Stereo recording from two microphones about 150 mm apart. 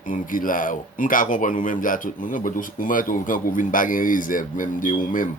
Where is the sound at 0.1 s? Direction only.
65° left (ahead or behind).